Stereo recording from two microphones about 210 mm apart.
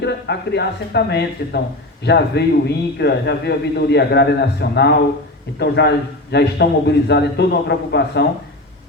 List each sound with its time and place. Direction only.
0.0 s a man's voice: 55° left (ahead or behind)